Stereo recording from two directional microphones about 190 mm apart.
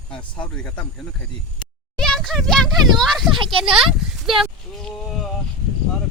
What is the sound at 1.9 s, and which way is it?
Speech, 5° left (ahead or behind).